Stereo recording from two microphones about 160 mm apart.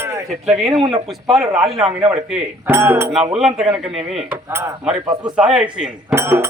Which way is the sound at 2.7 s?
15° right (ahead or behind).